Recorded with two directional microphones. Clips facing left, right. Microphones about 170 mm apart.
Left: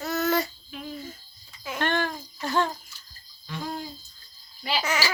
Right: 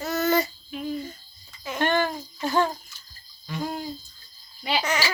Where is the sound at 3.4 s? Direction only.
10° right (ahead or behind).